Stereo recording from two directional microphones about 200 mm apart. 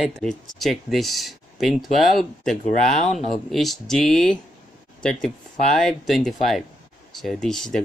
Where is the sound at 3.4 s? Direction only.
Centre (ahead or behind).